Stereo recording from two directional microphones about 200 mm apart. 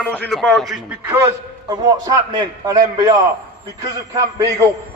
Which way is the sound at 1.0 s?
10° right (ahead or behind).